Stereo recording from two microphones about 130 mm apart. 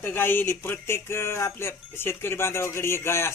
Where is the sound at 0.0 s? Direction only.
15° left (ahead or behind).